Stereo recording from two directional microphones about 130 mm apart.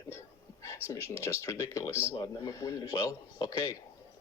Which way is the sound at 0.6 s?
20° left (ahead or behind).